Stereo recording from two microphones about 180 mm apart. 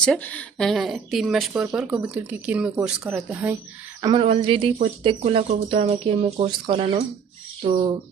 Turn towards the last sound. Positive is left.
turn(degrees=-25)  # may be behind; listen again after turning